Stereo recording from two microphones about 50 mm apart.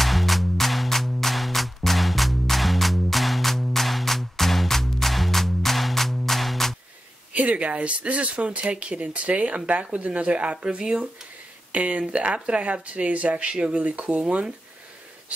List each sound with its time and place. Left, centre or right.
0.0 s music: centre
7.3 s speech: right
11.7 s speech: right